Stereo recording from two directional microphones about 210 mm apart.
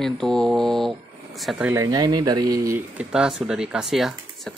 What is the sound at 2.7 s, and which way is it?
Speech, 5° right (ahead or behind).